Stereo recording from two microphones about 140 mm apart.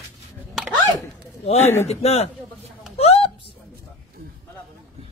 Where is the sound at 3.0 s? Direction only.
45° left (ahead or behind).